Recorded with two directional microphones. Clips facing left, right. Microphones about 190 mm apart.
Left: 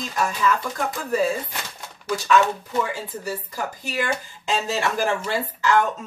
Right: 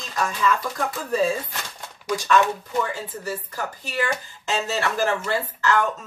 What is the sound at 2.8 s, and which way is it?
Speech, 10° left (ahead or behind).